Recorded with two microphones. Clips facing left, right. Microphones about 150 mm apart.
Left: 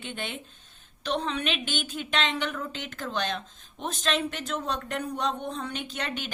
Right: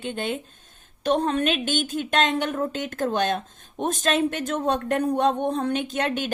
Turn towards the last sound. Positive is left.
turn(degrees=-45)  # may be behind; listen again after turning